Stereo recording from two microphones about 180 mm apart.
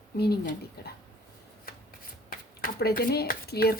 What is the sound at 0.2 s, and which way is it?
Speech, 60° left (ahead or behind).